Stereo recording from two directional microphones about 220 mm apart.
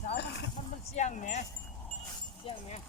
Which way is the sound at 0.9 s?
30° left (ahead or behind).